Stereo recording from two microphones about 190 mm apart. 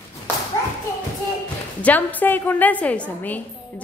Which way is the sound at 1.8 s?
10° left (ahead or behind).